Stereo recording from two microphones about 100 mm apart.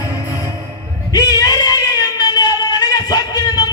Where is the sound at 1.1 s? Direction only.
40° left (ahead or behind).